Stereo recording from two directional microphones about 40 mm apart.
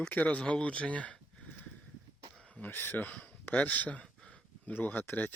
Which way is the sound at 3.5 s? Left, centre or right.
Left.